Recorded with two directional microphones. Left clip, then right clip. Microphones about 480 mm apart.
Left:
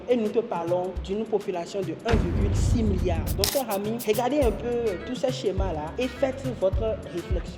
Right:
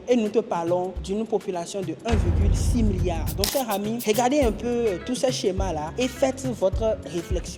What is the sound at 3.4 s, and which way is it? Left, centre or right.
Speech, centre.